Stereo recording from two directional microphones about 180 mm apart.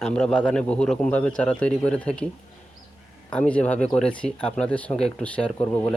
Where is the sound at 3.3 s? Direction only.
5° left (ahead or behind).